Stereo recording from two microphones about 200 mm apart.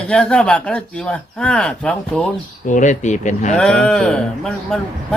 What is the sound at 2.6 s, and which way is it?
Speech, 40° left (ahead or behind).